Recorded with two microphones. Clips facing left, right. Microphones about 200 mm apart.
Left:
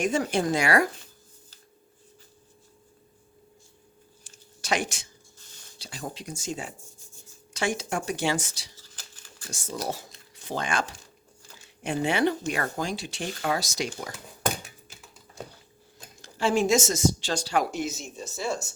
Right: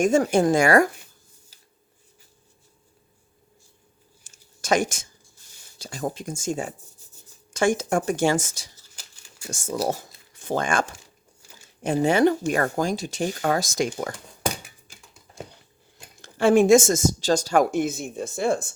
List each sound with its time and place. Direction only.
0.0 s speech: 45° right (ahead or behind)
4.2 s a sound: 45° right (ahead or behind)
5.8 s speech: 45° right (ahead or behind)
16.2 s speech: 55° right (ahead or behind)